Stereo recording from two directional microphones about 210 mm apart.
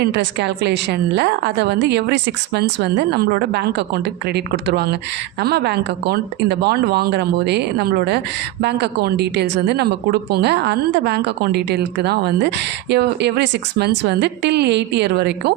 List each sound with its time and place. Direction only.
0.0 s a woman's voice: 55° right (ahead or behind)